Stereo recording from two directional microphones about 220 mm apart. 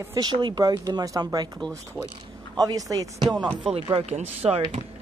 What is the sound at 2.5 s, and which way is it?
A woman's voice, 15° right (ahead or behind).